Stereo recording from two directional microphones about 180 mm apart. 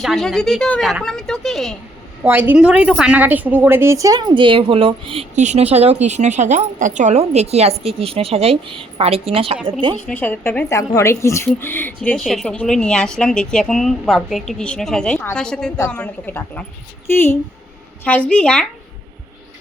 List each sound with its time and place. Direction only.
0.0 s speech: centre (ahead or behind)
2.2 s a woman's voice: 10° right (ahead or behind); by 5.2 s 30° right (ahead or behind)
5.4 s a woman's voice: 40° right (ahead or behind)
9.9 s speech: 10° left (ahead or behind)